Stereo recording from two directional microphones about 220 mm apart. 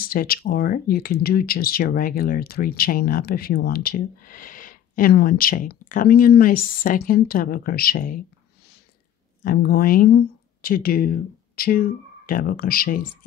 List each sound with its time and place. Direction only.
0.0 s speech: 40° left (ahead or behind)
9.4 s speech: 40° left (ahead or behind)